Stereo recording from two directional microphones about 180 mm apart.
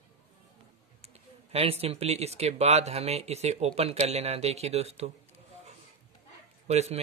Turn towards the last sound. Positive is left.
turn(degrees=-35)  # may be behind; listen again after turning